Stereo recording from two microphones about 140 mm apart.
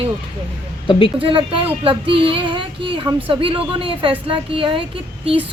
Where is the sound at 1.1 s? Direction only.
40° right (ahead or behind).